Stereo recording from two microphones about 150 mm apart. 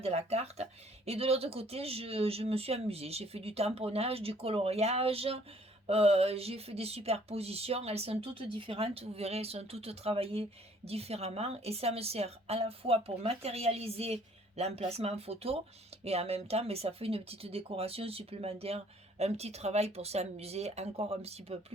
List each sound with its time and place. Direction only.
0.0 s a woman's voice: 45° right (ahead or behind)